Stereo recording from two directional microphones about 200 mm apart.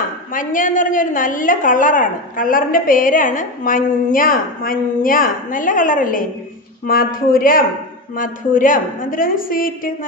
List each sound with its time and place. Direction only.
0.3 s a woman's voice: 40° left (ahead or behind)